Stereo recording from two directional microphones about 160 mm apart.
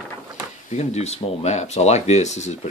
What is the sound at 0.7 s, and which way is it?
Speech, 45° left (ahead or behind).